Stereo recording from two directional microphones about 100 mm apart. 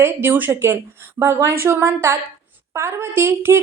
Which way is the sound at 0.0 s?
20° right (ahead or behind).